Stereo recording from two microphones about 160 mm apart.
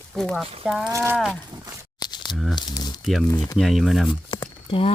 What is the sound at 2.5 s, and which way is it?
Speech, 25° left (ahead or behind).